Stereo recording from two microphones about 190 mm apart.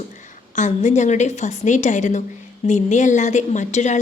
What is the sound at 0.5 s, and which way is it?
A woman's voice, 40° left (ahead or behind).